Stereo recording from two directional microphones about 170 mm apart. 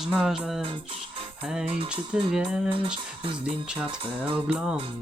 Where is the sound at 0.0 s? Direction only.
Centre (ahead or behind).